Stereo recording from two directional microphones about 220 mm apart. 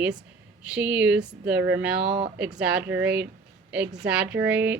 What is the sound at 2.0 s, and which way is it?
Speech, 50° right (ahead or behind).